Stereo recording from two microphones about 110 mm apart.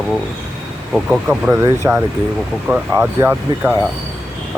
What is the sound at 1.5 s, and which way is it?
Speech, 25° right (ahead or behind).